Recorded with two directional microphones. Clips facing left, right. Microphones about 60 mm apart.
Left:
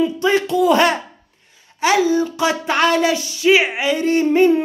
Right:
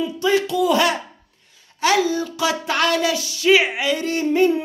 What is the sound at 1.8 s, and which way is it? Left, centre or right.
Speech, left.